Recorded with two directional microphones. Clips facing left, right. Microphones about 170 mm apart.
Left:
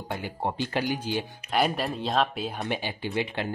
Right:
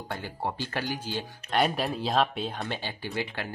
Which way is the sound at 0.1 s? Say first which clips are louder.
Left 3 dB; 15° left (ahead or behind).